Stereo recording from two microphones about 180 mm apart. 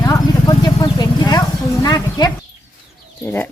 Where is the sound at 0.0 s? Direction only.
20° left (ahead or behind).